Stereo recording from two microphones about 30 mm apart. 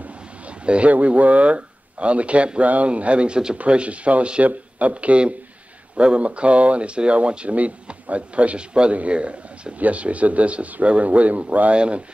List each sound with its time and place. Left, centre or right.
0.7 s speech: right
0.9 s speech: right
3.5 s speech: right
8.5 s speech: right
11.7 s speech: right